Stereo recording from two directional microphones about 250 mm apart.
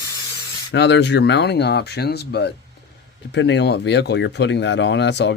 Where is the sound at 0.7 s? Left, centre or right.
Left.